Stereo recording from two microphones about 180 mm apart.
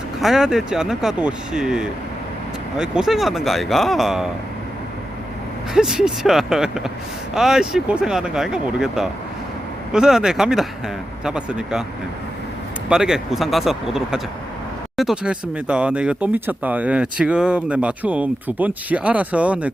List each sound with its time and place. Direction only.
0.2 s speech: centre (ahead or behind)
5.7 s speech: 5° right (ahead or behind)
12.9 s speech: 5° right (ahead or behind)